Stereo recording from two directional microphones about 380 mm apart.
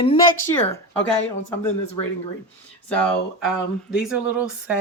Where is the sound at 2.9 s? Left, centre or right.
Centre.